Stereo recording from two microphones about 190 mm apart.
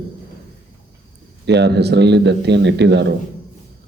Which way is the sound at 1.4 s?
65° right (ahead or behind).